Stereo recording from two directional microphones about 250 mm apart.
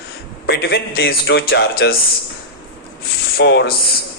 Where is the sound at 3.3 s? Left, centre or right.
Left.